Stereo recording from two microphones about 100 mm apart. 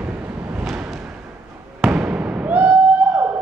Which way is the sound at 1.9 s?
15° right (ahead or behind).